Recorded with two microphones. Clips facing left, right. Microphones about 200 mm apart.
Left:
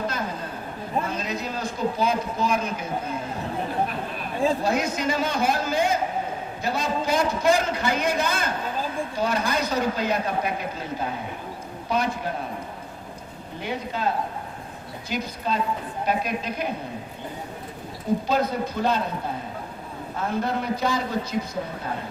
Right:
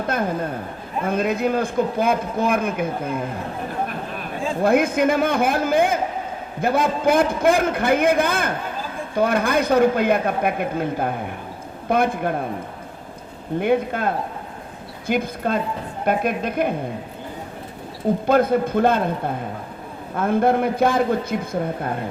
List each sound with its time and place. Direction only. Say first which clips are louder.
0.1 s a sound: right 8 dB; 55° right (ahead or behind)
1.0 s a man's voice: right 9 dB; 55° right (ahead or behind)
4.6 s a man's voice: right 7 dB; 55° right (ahead or behind)
13.6 s a man's voice: right 9 dB; 55° right (ahead or behind)
18.3 s a man's voice: right 7 dB; 55° right (ahead or behind)